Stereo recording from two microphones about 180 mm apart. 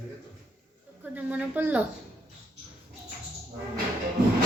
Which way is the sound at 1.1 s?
10° right (ahead or behind).